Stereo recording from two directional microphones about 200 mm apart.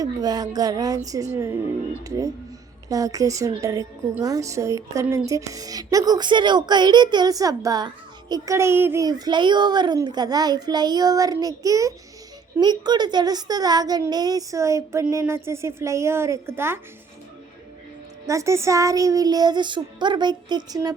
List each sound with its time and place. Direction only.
0.0 s a child's voice: 20° right (ahead or behind)
18.3 s speech: 15° right (ahead or behind)